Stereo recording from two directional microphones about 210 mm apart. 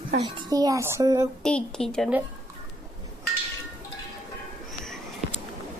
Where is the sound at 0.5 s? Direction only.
15° right (ahead or behind).